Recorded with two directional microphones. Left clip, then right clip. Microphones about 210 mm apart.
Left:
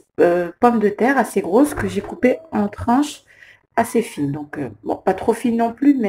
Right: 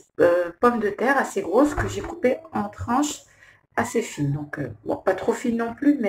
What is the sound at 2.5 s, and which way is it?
Speech, 35° left (ahead or behind).